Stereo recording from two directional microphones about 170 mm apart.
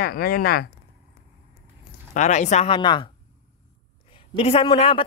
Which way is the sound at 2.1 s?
45° left (ahead or behind).